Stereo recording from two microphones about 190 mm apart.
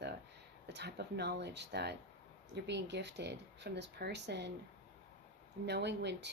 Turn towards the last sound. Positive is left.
turn(degrees=-65)  # may be behind; listen again after turning